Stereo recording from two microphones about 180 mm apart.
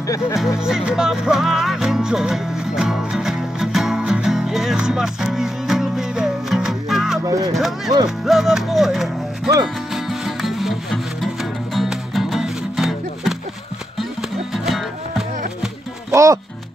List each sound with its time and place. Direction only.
0.0 s speech: 20° left (ahead or behind)
0.6 s music: 5° right (ahead or behind)
7.2 s speech: 20° right (ahead or behind)
7.5 s speech: centre (ahead or behind)
8.3 s music: centre (ahead or behind)
14.5 s music: centre (ahead or behind)
16.1 s speech: 15° right (ahead or behind)